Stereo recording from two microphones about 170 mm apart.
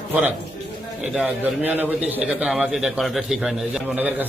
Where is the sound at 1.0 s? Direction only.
5° right (ahead or behind).